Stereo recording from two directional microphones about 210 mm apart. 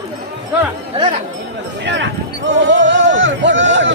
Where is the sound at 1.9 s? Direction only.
55° right (ahead or behind).